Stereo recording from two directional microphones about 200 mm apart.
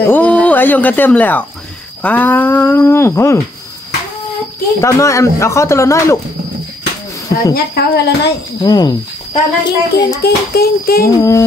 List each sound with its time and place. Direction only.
0.0 s speech: 10° left (ahead or behind)
4.8 s speech: 15° left (ahead or behind)
7.5 s a woman's voice: 55° left (ahead or behind)
8.6 s speech: 20° left (ahead or behind)
10.2 s a child's voice: 50° left (ahead or behind)
11.1 s speech: 15° left (ahead or behind)